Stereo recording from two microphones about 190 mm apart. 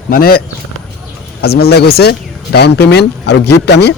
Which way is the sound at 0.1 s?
50° left (ahead or behind).